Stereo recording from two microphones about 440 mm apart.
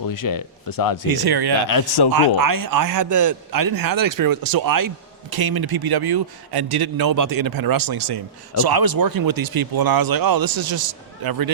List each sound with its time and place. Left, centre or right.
0.1 s speech: left
1.1 s a man's voice: right